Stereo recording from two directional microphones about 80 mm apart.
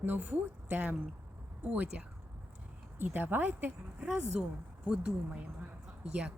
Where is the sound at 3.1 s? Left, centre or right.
Right.